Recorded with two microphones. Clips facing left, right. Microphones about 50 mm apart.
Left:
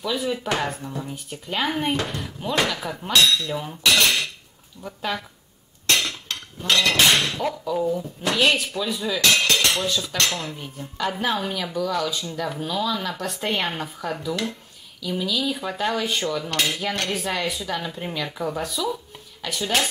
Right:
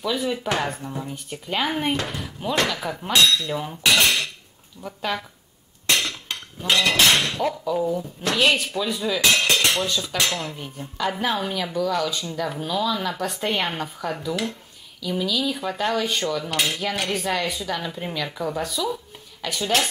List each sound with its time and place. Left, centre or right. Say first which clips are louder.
0.0 s cutlery: right 1 dB; centre
3.1 s speech: even; centre
4.8 s cutlery: right 1 dB; centre
6.2 s speech: even; centre
7.3 s cutlery: right 1 dB; centre
9.4 s dishes: even; right
9.8 s cutlery: even; centre
10.1 s speech: even; centre
10.5 s cutlery: even; centre